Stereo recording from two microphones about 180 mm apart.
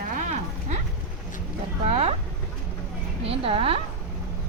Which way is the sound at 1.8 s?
35° right (ahead or behind).